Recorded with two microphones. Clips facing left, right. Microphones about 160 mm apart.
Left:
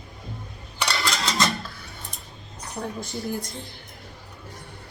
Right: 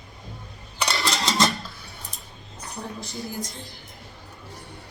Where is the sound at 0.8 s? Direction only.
25° right (ahead or behind).